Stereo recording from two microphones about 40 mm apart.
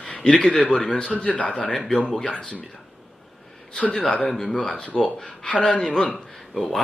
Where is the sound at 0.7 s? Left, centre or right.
Left.